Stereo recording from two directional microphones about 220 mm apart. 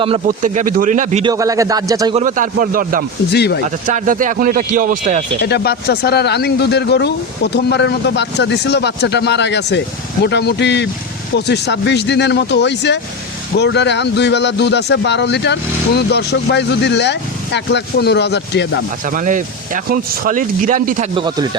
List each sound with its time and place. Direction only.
0.3 s speech: 35° right (ahead or behind)
1.2 s speech: 15° right (ahead or behind)
2.1 s speech: 35° right (ahead or behind)
3.2 s speech: 50° left (ahead or behind)
3.8 s speech: 35° right (ahead or behind)
5.4 s speech: 45° left (ahead or behind)
19.0 s speech: 35° right (ahead or behind)
21.2 s speech: 20° right (ahead or behind)